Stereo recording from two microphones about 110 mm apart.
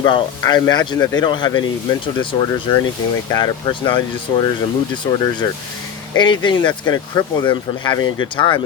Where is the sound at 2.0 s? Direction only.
50° left (ahead or behind).